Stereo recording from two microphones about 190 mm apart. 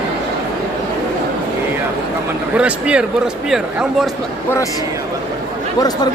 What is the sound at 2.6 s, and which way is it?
Speech, 5° right (ahead or behind).